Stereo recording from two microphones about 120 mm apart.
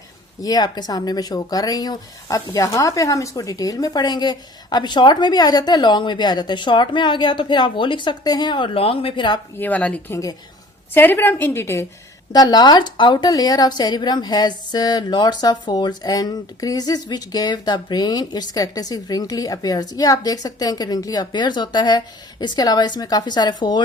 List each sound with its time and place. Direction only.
0.4 s speech: 35° left (ahead or behind)
9.6 s a woman's voice: 15° left (ahead or behind)
12.3 s speech: 35° left (ahead or behind)